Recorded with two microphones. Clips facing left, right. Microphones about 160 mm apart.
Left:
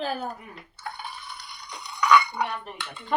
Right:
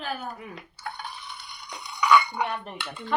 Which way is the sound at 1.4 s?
Centre (ahead or behind).